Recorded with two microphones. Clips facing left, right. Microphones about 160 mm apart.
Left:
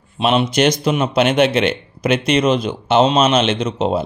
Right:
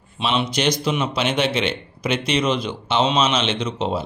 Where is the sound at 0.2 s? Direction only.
50° left (ahead or behind).